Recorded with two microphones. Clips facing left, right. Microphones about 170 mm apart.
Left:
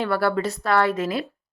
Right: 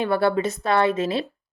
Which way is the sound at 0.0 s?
20° right (ahead or behind).